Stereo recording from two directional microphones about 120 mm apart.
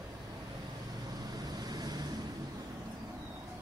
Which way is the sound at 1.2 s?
35° right (ahead or behind).